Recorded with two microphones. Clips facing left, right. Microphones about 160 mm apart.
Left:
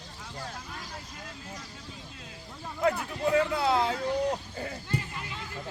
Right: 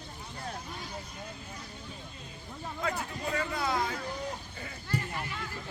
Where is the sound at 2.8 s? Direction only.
65° left (ahead or behind).